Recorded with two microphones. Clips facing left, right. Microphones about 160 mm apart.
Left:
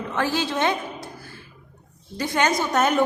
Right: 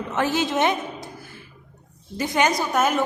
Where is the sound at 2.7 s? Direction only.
5° right (ahead or behind).